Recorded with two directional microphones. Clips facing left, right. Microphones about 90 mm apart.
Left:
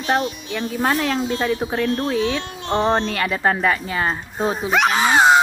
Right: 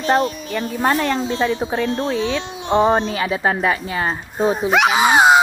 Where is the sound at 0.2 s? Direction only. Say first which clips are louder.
Right 4 dB; 40° right (ahead or behind).